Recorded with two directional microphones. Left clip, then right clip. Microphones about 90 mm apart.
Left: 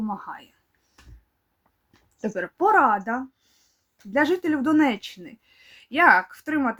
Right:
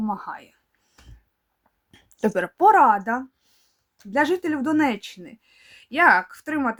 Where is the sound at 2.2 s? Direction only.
65° right (ahead or behind).